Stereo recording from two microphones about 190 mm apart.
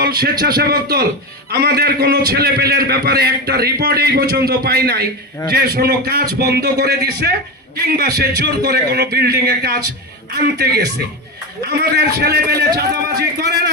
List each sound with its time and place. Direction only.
0.0 s a man's voice: 55° right (ahead or behind)